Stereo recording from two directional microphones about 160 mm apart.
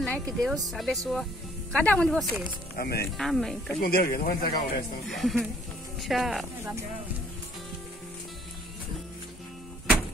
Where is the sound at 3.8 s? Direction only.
70° left (ahead or behind).